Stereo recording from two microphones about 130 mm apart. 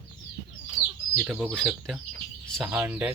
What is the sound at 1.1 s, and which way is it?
Speech, 10° right (ahead or behind).